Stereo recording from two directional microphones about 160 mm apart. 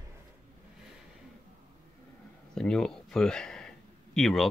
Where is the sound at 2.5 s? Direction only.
5° left (ahead or behind).